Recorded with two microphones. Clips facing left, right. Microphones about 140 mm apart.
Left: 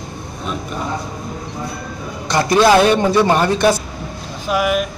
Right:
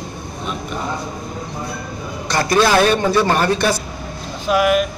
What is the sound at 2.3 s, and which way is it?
A man's voice, 20° left (ahead or behind).